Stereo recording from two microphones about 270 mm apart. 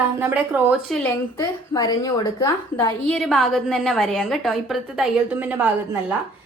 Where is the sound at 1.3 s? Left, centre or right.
Centre.